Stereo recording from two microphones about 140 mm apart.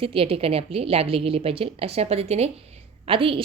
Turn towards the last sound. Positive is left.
turn(degrees=-40)  # may be behind; listen again after turning